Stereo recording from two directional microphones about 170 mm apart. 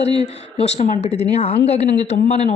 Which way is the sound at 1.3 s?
35° left (ahead or behind).